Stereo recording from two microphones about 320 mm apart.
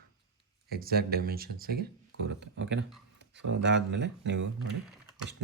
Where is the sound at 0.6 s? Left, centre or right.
Right.